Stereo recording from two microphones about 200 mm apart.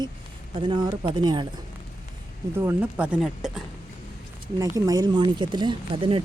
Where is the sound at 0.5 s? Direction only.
25° right (ahead or behind).